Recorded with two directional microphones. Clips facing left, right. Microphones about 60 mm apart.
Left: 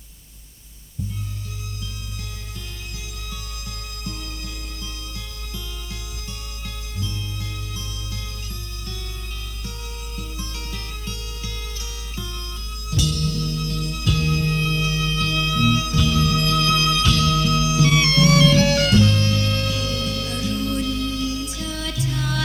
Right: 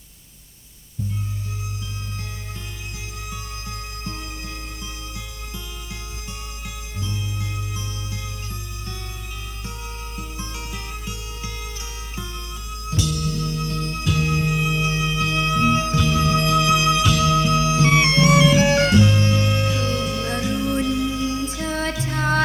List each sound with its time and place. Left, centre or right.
3.3 s music: right
10.2 s music: right
12.9 s music: right